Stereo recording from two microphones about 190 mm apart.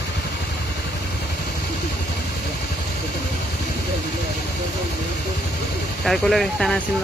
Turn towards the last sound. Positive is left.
turn(degrees=0)  # may be behind; listen again after turning